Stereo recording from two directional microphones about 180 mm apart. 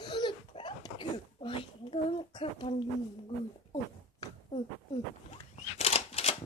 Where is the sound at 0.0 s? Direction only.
25° left (ahead or behind).